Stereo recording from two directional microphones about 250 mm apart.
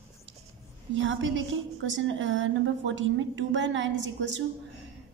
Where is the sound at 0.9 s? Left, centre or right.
Right.